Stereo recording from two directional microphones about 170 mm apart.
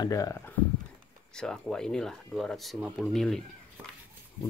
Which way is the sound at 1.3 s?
5° left (ahead or behind).